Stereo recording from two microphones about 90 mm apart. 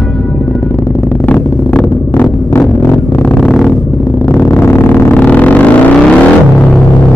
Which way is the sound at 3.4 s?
Centre (ahead or behind).